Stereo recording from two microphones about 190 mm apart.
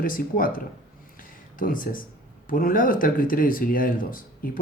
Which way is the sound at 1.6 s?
45° left (ahead or behind).